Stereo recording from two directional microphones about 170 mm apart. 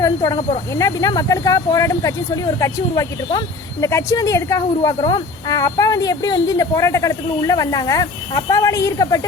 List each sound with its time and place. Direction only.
0.0 s speech: 20° left (ahead or behind)